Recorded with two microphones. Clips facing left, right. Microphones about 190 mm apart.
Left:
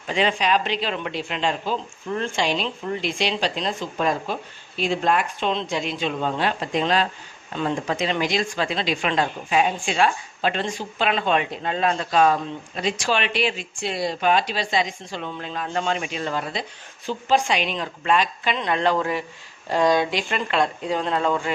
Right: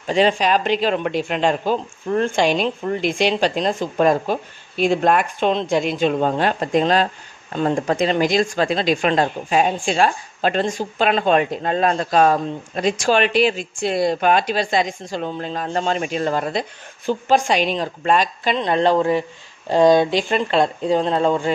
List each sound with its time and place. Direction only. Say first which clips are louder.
0.0 s speech: right 5 dB; 40° right (ahead or behind)